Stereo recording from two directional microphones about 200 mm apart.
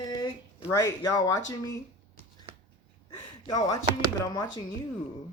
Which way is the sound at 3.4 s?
15° left (ahead or behind).